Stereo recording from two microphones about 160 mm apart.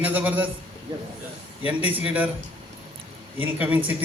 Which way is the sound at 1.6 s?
10° right (ahead or behind).